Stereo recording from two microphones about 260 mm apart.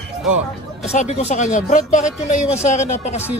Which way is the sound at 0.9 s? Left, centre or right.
Left.